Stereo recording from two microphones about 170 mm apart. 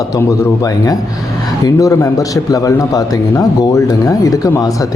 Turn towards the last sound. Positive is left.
turn(degrees=20)  # may be behind; listen again after turning